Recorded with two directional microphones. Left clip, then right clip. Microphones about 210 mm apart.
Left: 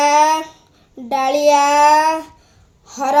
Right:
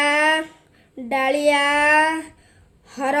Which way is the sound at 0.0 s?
25° left (ahead or behind).